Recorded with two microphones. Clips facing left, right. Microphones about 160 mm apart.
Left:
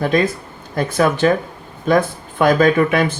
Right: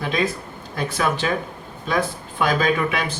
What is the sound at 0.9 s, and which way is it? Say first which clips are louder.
Speech: left 8 dB; 50° left (ahead or behind).